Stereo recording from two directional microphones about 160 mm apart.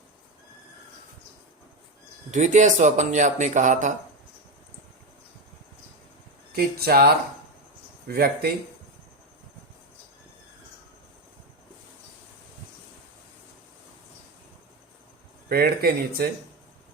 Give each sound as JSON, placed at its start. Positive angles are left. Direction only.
{"t": 2.3, "sound": "speech", "side_deg": -50}
{"t": 6.6, "sound": "speech", "side_deg": -75}
{"t": 15.4, "sound": "speech", "side_deg": -70}